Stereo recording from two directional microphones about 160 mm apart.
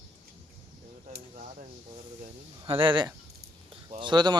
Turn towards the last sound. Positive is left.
turn(degrees=-25)  # may be behind; listen again after turning